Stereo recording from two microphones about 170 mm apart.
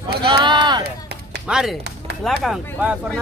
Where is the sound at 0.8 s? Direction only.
70° right (ahead or behind).